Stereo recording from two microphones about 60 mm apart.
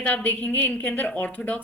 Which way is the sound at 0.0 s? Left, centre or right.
Left.